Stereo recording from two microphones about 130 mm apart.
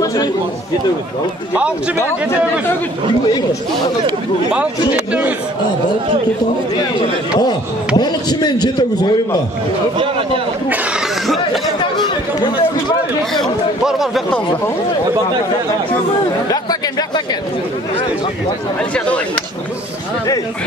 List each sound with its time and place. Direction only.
0.0 s chatter: 30° left (ahead or behind)
3.3 s speech: 30° left (ahead or behind)
6.8 s speech: 35° left (ahead or behind)
9.9 s a man's voice: 45° right (ahead or behind)
11.2 s chatter: centre (ahead or behind)
13.3 s speech: centre (ahead or behind)
18.9 s speech: 10° left (ahead or behind)